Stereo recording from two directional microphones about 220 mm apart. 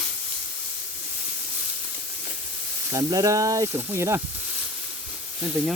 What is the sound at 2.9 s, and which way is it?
Speech, 15° right (ahead or behind).